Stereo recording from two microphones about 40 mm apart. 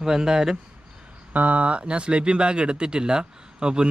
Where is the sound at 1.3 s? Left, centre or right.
Right.